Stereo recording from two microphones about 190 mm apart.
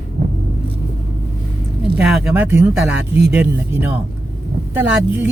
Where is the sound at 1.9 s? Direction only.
5° right (ahead or behind).